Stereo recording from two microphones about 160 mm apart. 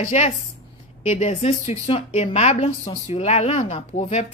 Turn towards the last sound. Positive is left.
turn(degrees=45)  # may be behind; listen again after turning